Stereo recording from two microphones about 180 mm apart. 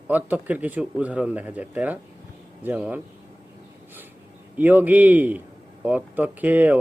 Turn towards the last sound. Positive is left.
turn(degrees=-10)  # may be behind; listen again after turning